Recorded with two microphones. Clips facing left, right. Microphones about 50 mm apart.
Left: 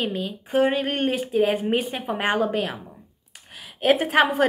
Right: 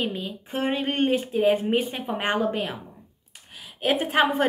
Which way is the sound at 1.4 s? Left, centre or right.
Centre.